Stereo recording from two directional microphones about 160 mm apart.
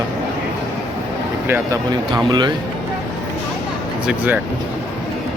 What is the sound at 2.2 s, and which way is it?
Speech, 30° right (ahead or behind).